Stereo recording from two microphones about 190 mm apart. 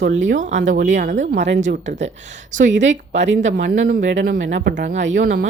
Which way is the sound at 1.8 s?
40° right (ahead or behind).